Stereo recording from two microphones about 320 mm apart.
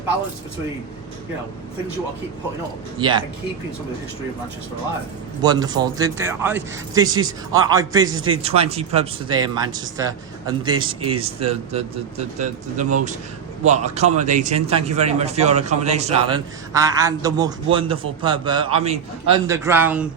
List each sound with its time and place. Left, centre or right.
3.0 s a man's voice: centre
5.4 s a man's voice: centre